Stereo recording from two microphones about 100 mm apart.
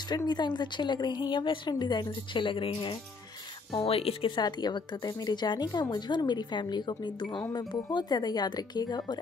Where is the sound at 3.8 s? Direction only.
75° left (ahead or behind).